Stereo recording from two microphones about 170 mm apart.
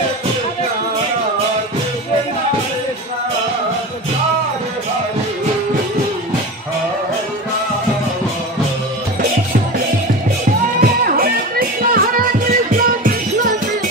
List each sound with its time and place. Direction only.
10.8 s music: 55° right (ahead or behind)